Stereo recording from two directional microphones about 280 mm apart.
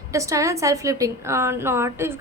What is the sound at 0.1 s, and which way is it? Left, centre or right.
A woman's voice, centre.